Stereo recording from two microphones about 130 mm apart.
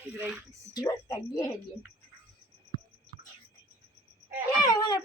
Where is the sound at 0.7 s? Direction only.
30° left (ahead or behind).